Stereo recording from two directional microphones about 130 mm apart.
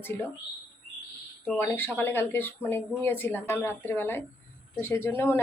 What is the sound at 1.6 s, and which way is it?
Speech, 15° left (ahead or behind).